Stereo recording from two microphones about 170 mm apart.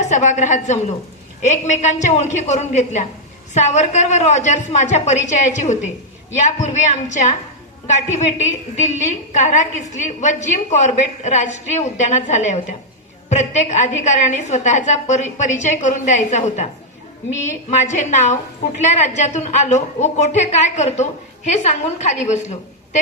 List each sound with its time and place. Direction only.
0.0 s a woman's voice: 45° left (ahead or behind)
17.7 s a woman's voice: 45° left (ahead or behind)